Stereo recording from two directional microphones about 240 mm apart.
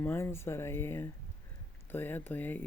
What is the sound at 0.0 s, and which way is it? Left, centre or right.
Speech, centre.